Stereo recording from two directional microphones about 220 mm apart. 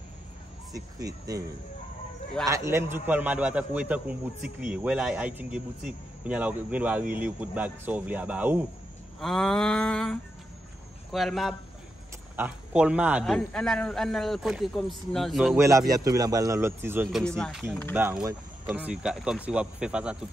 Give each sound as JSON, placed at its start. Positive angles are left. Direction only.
{"t": 0.7, "sound": "a man's voice", "side_deg": -15}
{"t": 2.4, "sound": "a man's voice", "side_deg": -15}
{"t": 15.5, "sound": "a man's voice", "side_deg": -15}
{"t": 17.2, "sound": "a man's voice", "side_deg": 5}
{"t": 17.9, "sound": "a man's voice", "side_deg": -10}